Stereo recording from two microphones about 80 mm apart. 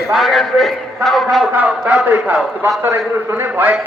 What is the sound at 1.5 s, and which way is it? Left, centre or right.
Speech, centre.